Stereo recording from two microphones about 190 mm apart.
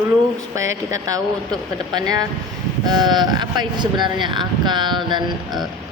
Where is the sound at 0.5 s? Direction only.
15° right (ahead or behind).